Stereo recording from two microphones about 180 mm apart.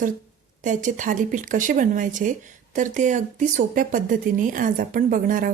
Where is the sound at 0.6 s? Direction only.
45° right (ahead or behind).